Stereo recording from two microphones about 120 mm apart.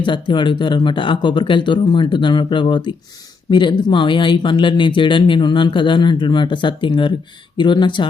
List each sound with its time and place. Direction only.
0.0 s speech: 40° left (ahead or behind)